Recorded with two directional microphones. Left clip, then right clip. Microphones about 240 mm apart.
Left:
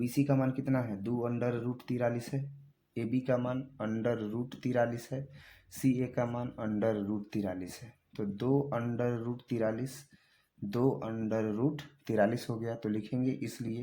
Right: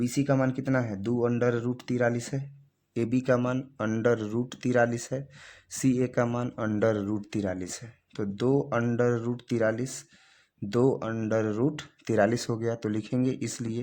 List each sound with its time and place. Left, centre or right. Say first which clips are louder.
0.0 s speech: right 5 dB; right